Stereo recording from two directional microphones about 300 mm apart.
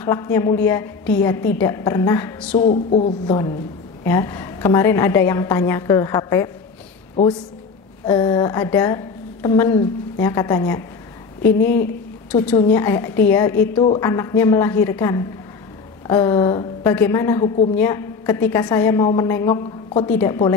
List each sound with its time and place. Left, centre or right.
0.0 s a woman's voice: centre
2.5 s a woman's voice: left
4.0 s a woman's voice: centre
8.0 s a woman's voice: centre
12.3 s a woman's voice: centre